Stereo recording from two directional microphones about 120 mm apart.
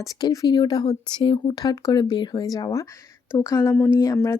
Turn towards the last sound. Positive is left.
turn(degrees=25)  # may be behind; listen again after turning